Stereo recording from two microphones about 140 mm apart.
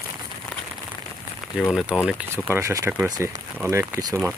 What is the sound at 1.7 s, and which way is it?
Speech, 5° right (ahead or behind).